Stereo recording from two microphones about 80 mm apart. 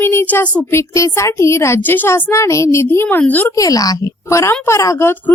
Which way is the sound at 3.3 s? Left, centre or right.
Left.